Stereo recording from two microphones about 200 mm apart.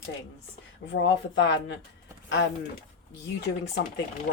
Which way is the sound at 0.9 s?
65° left (ahead or behind).